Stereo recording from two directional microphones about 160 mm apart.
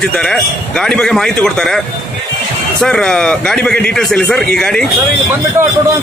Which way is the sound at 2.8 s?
5° left (ahead or behind).